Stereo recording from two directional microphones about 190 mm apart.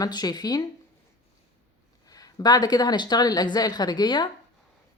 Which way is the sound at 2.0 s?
20° left (ahead or behind).